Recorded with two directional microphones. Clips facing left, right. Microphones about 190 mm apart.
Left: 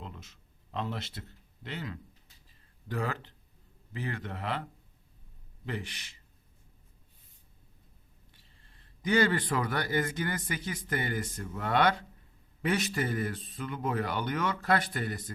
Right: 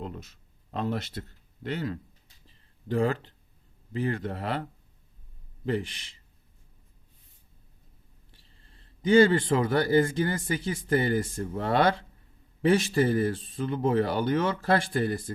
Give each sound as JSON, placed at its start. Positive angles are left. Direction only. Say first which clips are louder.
{"t": 0.0, "sound": "a sound", "louder": "right 8 dB", "side_deg": -40}
{"t": 1.6, "sound": "speech", "louder": "right 8 dB", "side_deg": -40}
{"t": 2.9, "sound": "speech", "louder": "right 8 dB", "side_deg": -30}
{"t": 5.6, "sound": "speech", "louder": "right 9 dB", "side_deg": -30}
{"t": 8.3, "sound": "a man's voice", "louder": "right 5 dB", "side_deg": -30}